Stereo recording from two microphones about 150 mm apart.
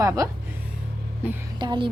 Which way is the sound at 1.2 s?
10° right (ahead or behind).